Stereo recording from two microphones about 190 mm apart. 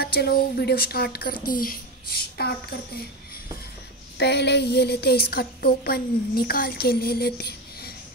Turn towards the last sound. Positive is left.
turn(degrees=55)  # may be behind; listen again after turning